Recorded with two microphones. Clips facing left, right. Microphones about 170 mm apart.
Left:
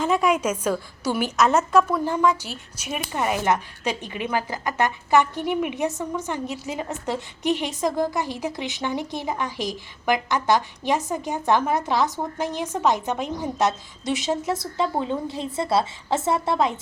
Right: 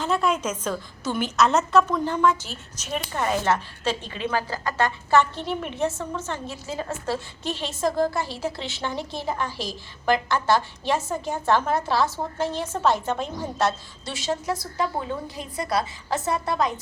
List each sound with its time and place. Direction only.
0.0 s a woman's voice: 10° left (ahead or behind)